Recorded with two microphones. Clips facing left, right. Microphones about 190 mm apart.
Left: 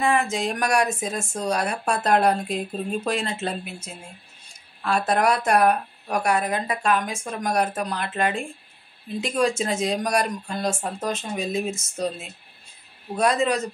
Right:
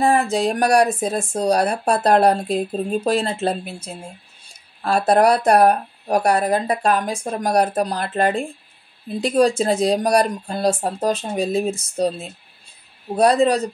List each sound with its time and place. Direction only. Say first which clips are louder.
0.0 s speech: right 5 dB; 35° right (ahead or behind)